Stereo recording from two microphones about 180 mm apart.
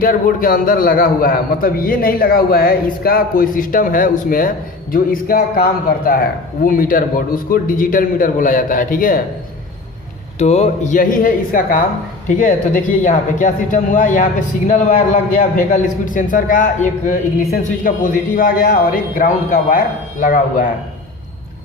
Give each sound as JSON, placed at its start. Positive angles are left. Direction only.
{"t": 0.0, "sound": "a man's voice", "side_deg": 50}
{"t": 10.3, "sound": "a man's voice", "side_deg": 35}